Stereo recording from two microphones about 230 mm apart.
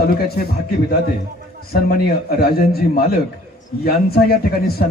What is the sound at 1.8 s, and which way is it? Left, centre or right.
A man's voice, left.